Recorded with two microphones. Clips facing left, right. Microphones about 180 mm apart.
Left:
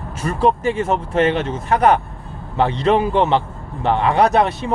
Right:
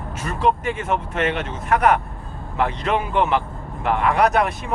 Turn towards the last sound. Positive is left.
turn(degrees=30)  # may be behind; listen again after turning